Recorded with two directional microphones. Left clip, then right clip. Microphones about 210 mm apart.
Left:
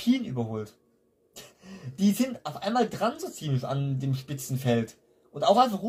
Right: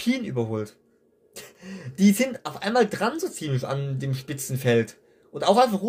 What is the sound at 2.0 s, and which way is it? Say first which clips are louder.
Speech: right 5 dB; 45° right (ahead or behind).